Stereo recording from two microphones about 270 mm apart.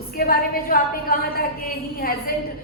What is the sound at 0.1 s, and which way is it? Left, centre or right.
A woman's voice, left.